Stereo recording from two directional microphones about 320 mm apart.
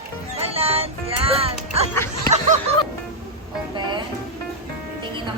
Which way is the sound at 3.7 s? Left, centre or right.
Centre.